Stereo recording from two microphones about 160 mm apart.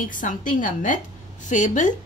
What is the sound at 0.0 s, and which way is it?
A woman's voice, 55° left (ahead or behind).